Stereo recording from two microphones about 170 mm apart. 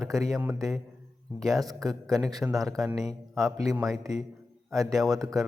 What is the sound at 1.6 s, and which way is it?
Speech, 20° right (ahead or behind).